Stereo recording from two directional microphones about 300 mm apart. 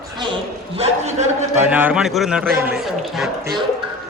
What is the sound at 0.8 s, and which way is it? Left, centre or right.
Speech, right.